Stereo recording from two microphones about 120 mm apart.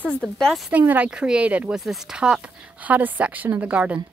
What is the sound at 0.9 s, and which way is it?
Speech, 10° right (ahead or behind).